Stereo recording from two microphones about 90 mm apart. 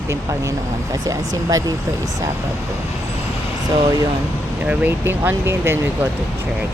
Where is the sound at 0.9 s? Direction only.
40° right (ahead or behind).